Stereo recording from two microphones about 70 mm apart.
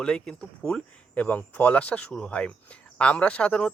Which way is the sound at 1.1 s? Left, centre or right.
Left.